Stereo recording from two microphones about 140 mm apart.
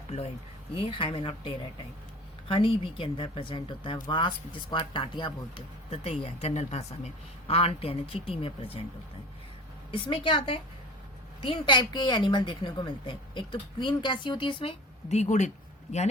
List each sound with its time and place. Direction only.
0.1 s speech: 50° left (ahead or behind)
0.8 s speech: 40° left (ahead or behind)
9.9 s speech: 40° left (ahead or behind); by 16.0 s 55° left (ahead or behind)